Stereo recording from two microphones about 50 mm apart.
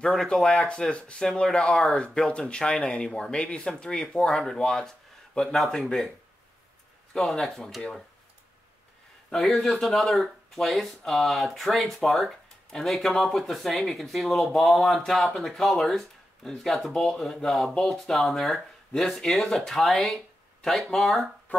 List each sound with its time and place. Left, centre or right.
0.0 s speech: centre
7.2 s speech: centre
9.3 s speech: centre